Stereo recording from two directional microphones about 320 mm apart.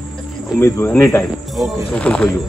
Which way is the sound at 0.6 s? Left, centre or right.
Centre.